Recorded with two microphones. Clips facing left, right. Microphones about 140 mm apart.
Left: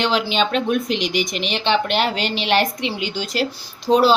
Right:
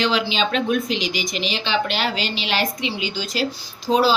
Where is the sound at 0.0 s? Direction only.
55° left (ahead or behind).